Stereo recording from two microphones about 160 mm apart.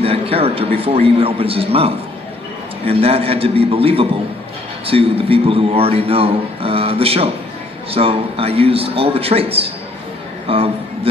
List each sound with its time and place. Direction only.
0.0 s a man's voice: 40° right (ahead or behind)